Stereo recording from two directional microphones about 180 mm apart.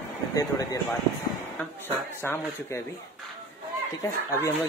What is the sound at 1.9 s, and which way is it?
Speech, 15° left (ahead or behind).